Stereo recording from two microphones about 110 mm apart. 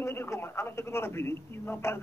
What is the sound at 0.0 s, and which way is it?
A man's voice, 25° left (ahead or behind).